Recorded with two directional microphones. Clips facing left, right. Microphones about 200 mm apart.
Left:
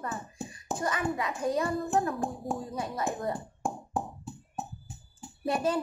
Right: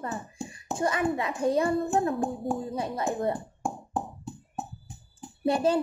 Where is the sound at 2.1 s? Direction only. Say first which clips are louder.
Right 4 dB; centre (ahead or behind).